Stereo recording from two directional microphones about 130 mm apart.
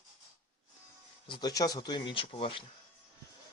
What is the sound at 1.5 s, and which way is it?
Speech, 30° left (ahead or behind).